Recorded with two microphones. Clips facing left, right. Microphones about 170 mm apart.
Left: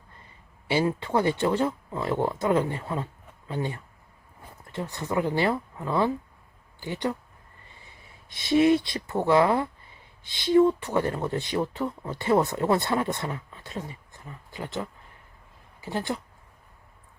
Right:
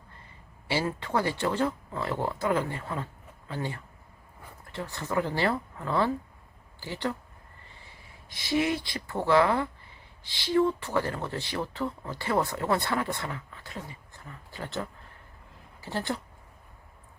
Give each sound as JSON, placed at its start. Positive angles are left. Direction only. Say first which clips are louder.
{"t": 0.7, "sound": "speech", "louder": "left 4 dB", "side_deg": 20}
{"t": 8.3, "sound": "speech", "louder": "left 7 dB", "side_deg": 25}